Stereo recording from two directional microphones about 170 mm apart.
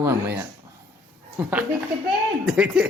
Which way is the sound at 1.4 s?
10° right (ahead or behind).